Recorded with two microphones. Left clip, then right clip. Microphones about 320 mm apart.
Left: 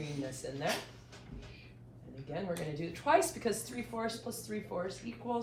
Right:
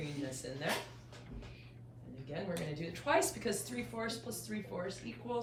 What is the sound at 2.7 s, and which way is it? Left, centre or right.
A woman's voice, centre.